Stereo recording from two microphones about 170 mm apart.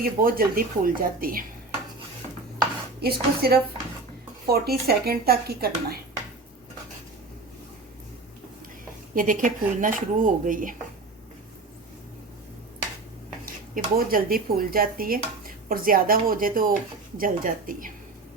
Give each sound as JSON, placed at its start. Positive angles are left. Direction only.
{"t": 0.0, "sound": "speech", "side_deg": -60}
{"t": 3.0, "sound": "speech", "side_deg": -65}
{"t": 9.1, "sound": "speech", "side_deg": -50}
{"t": 13.4, "sound": "speech", "side_deg": -60}